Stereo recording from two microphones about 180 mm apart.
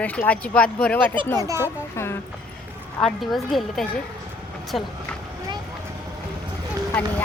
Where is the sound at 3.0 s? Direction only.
Centre (ahead or behind).